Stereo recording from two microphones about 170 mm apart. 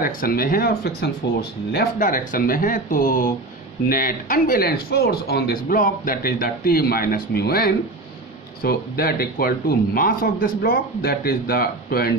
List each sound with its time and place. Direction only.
0.0 s speech: 60° left (ahead or behind)